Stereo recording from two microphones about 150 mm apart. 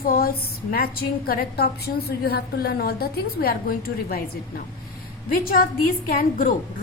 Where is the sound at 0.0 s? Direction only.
75° left (ahead or behind).